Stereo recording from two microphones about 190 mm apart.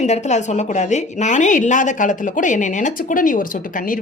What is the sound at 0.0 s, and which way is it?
A woman's voice, 35° left (ahead or behind).